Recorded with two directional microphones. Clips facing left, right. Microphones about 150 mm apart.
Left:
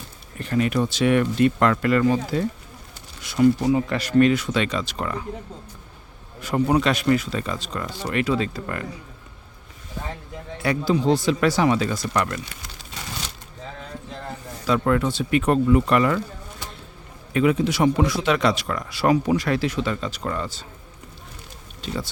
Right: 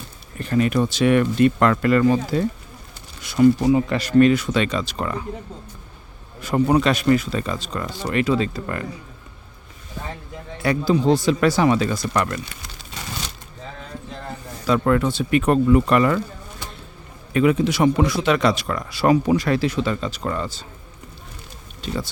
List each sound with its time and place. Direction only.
0.3 s speech: 40° right (ahead or behind)
3.6 s speech: 20° right (ahead or behind)
4.2 s speech: 40° right (ahead or behind)
6.4 s speech: 40° right (ahead or behind)
10.6 s speech: 40° right (ahead or behind)
14.7 s speech: 50° right (ahead or behind)
17.3 s speech: 55° right (ahead or behind)
18.3 s speech: 40° right (ahead or behind)